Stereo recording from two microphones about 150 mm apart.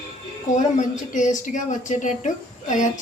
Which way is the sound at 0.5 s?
55° left (ahead or behind).